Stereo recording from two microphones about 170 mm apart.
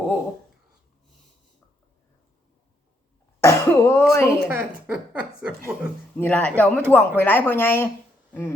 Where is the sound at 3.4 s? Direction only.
15° left (ahead or behind).